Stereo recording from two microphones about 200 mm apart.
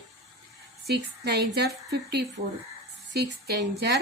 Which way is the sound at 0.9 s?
55° right (ahead or behind).